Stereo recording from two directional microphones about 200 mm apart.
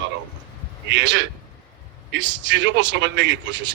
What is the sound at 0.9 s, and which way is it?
Speech, 65° right (ahead or behind).